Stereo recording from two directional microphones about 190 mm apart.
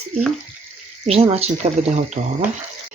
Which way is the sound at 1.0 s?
30° right (ahead or behind).